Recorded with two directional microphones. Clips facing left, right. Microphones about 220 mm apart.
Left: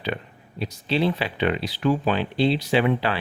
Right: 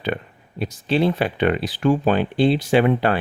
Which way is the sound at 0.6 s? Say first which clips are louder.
Right 3 dB; 50° right (ahead or behind).